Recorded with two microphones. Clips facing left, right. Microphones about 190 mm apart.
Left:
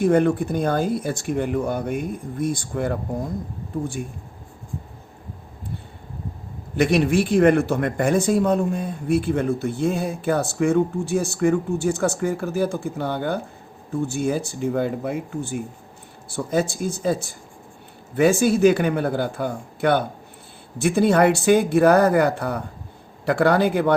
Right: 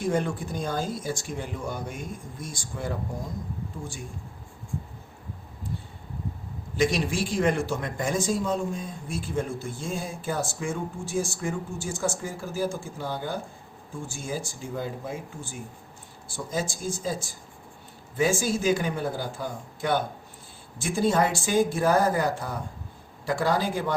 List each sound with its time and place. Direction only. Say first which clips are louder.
0.0 s speech: left 9 dB; 60° left (ahead or behind)
6.7 s speech: left 7 dB; 60° left (ahead or behind)